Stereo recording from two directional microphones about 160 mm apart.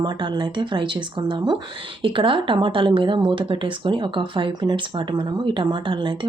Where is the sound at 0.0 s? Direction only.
30° right (ahead or behind).